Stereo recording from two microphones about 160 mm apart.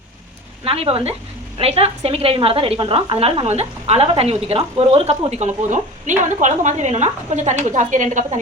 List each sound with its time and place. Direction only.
0.6 s a woman's voice: 35° right (ahead or behind)